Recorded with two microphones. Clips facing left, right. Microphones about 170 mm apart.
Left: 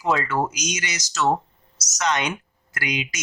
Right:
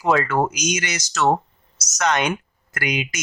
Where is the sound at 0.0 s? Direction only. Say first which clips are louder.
Right 3 dB; 60° right (ahead or behind).